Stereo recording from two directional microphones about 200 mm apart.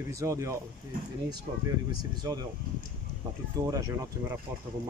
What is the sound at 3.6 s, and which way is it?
Speech, 15° right (ahead or behind).